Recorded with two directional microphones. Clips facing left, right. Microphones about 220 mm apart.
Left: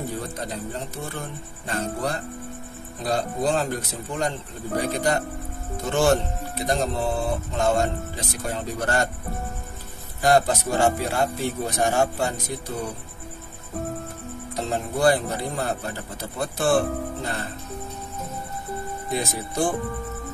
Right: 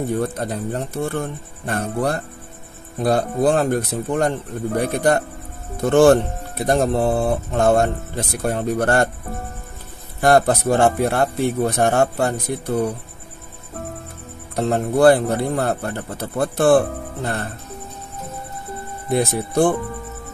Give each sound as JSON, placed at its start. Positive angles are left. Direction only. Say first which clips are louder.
{"t": 0.2, "sound": "speech", "louder": "right 8 dB", "side_deg": -60}
{"t": 10.2, "sound": "speech", "louder": "right 5 dB", "side_deg": -60}
{"t": 14.5, "sound": "speech", "louder": "right 8 dB", "side_deg": -60}
{"t": 19.0, "sound": "speech", "louder": "right 9 dB", "side_deg": -60}